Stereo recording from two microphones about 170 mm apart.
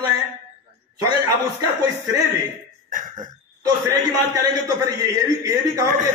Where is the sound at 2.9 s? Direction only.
50° right (ahead or behind).